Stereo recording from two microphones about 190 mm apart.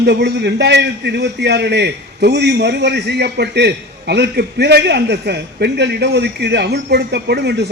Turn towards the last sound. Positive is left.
turn(degrees=-60)  # may be behind; listen again after turning